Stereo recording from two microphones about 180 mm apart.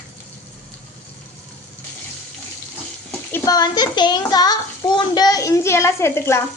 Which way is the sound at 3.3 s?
15° left (ahead or behind).